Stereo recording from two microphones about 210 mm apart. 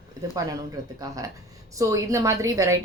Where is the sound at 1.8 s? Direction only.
15° right (ahead or behind).